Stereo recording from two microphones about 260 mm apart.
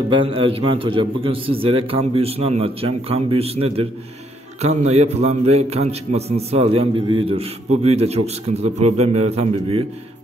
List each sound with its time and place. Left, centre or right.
0.1 s a man's voice: centre